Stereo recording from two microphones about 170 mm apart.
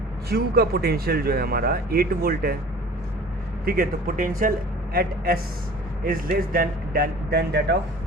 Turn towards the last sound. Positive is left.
turn(degrees=-75)  # may be behind; listen again after turning